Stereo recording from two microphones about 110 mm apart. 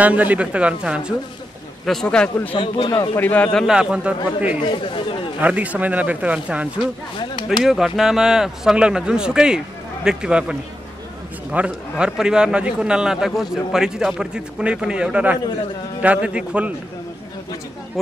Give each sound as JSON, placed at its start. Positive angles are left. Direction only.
{"t": 0.0, "sound": "a man's voice", "side_deg": -15}
{"t": 1.9, "sound": "speech", "side_deg": 5}
{"t": 2.5, "sound": "speech", "side_deg": 50}
{"t": 3.2, "sound": "speech", "side_deg": 15}
{"t": 3.6, "sound": "a man's voice", "side_deg": -5}
{"t": 4.6, "sound": "speech", "side_deg": 55}
{"t": 5.4, "sound": "a man's voice", "side_deg": -15}
{"t": 6.8, "sound": "speech", "side_deg": 50}
{"t": 7.4, "sound": "a man's voice", "side_deg": 0}